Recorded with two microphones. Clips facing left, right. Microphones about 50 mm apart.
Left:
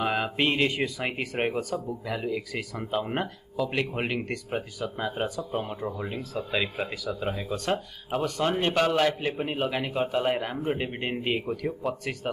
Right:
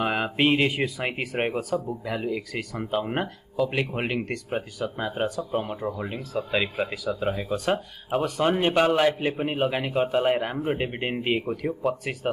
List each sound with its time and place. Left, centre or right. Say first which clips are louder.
0.0 s a man's voice: right 2 dB; centre